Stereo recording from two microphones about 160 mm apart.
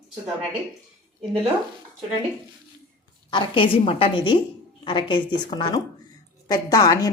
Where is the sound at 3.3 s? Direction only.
30° left (ahead or behind).